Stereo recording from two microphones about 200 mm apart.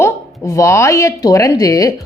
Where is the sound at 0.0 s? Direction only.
15° left (ahead or behind).